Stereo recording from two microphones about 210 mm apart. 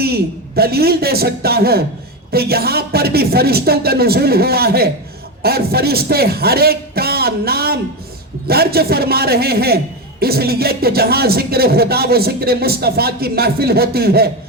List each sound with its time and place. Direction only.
0.0 s a man's voice: 50° right (ahead or behind)